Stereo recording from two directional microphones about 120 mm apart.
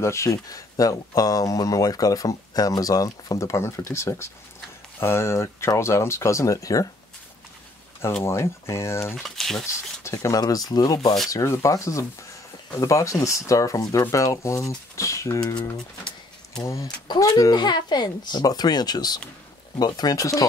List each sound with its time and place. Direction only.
0.0 s speech: 25° left (ahead or behind)
8.2 s speech: 20° left (ahead or behind)
9.1 s speech: centre (ahead or behind)
10.0 s speech: 25° left (ahead or behind)
16.6 s speech: 25° left (ahead or behind)